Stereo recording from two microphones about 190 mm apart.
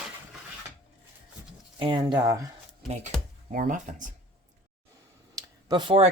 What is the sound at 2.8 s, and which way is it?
Speech, 35° right (ahead or behind).